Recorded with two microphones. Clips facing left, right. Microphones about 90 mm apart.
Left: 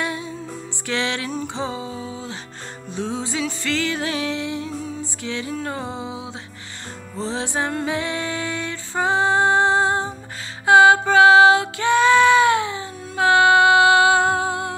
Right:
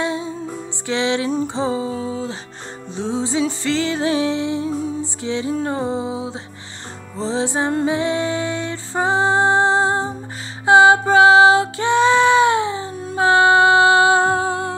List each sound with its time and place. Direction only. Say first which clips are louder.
0.0 s music: right 4 dB; 25° right (ahead or behind)
1.3 s music: right 6 dB; 30° right (ahead or behind)